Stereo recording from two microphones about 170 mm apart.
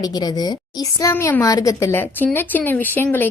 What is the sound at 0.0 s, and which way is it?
A woman's voice, 25° left (ahead or behind).